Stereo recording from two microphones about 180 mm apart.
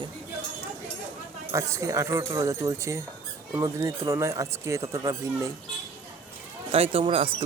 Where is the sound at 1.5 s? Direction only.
15° right (ahead or behind).